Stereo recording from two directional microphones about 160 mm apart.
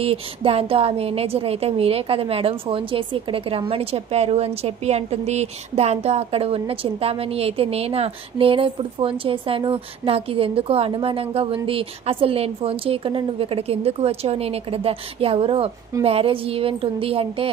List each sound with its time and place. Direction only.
0.0 s a woman's voice: 35° right (ahead or behind)